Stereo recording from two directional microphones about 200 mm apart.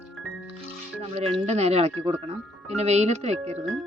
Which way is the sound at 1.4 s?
30° right (ahead or behind).